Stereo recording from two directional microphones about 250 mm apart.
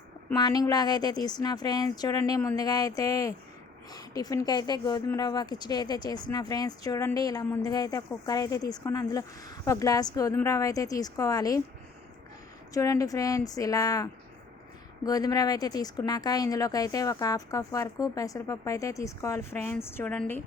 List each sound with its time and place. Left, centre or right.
0.3 s speech: centre
12.7 s speech: centre